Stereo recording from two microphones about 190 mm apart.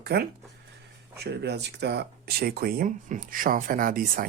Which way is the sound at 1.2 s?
60° right (ahead or behind).